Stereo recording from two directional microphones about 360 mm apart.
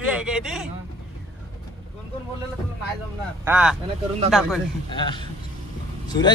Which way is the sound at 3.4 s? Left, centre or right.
Centre.